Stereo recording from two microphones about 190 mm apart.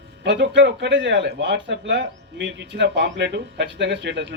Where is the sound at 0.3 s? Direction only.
65° right (ahead or behind).